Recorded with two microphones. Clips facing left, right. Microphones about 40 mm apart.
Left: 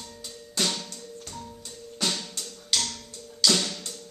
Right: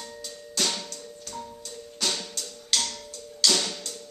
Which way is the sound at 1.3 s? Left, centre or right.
Centre.